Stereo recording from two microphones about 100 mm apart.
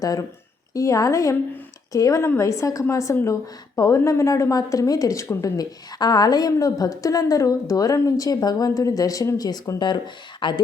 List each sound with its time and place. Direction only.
0.0 s a woman's voice: 35° left (ahead or behind); by 10.6 s 55° left (ahead or behind)